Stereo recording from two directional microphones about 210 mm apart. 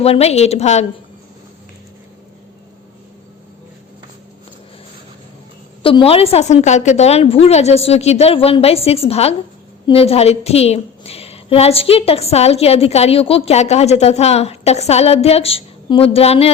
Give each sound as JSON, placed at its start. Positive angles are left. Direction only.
{"t": 0.0, "sound": "a woman's voice", "side_deg": 30}
{"t": 5.8, "sound": "a woman's voice", "side_deg": 25}